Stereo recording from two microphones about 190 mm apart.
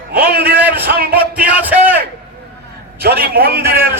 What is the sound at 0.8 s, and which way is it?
Speech, 55° right (ahead or behind).